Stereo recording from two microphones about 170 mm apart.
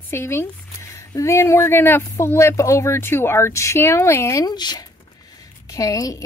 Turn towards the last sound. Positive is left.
turn(degrees=20)  # may be behind; listen again after turning